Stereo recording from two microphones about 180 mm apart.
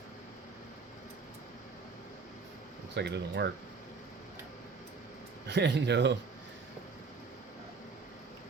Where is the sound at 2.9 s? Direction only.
70° right (ahead or behind).